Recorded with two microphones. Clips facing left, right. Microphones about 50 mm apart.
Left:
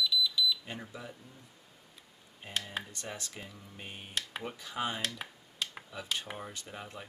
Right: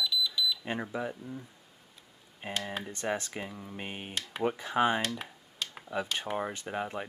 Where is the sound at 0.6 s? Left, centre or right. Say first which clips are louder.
Right 9 dB; right.